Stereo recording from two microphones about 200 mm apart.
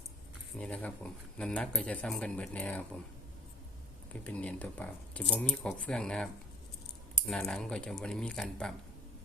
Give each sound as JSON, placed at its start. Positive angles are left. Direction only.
{"t": 0.6, "sound": "speech", "side_deg": 5}
{"t": 4.1, "sound": "speech", "side_deg": 5}